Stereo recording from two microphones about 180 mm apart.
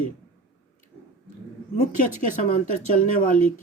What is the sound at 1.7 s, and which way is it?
Speech, 45° left (ahead or behind).